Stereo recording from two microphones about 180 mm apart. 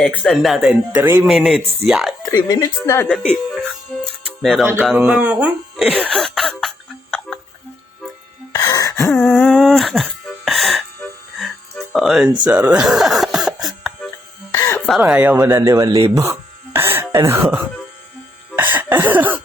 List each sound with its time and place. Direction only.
0.0 s speech: 5° left (ahead or behind)
2.6 s speech: 15° left (ahead or behind)
4.0 s music: centre (ahead or behind)
8.5 s gasp: 20° left (ahead or behind)
9.0 s music: 10° left (ahead or behind)
12.5 s a sound: 10° right (ahead or behind)
14.8 s speech: centre (ahead or behind)
18.5 s cough: 10° right (ahead or behind)